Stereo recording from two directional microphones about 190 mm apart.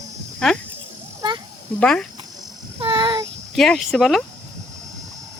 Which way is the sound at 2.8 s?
25° right (ahead or behind).